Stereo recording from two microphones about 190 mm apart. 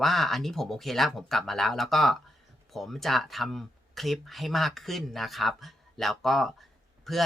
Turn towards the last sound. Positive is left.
turn(degrees=0)  # may be behind; listen again after turning